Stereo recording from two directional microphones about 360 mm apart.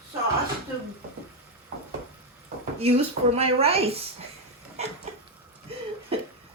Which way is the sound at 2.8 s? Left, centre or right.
Centre.